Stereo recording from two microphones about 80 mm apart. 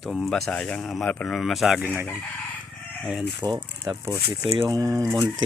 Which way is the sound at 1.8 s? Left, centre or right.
Right.